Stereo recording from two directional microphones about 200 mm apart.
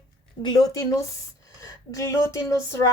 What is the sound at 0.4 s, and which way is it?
Speech, 20° left (ahead or behind).